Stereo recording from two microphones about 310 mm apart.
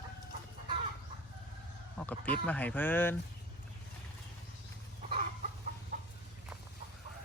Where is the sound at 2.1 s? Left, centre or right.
Centre.